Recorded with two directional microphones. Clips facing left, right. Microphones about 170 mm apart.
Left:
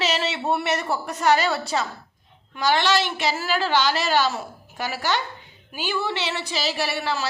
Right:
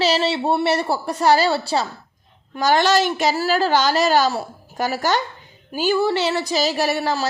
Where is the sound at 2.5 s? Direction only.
45° right (ahead or behind).